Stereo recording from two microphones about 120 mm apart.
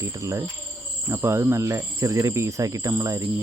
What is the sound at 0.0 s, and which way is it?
Speech, 25° right (ahead or behind).